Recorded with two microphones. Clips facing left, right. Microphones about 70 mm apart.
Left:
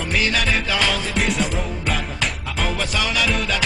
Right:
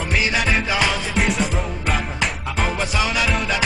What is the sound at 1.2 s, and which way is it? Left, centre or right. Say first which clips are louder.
Music: right 2 dB; centre.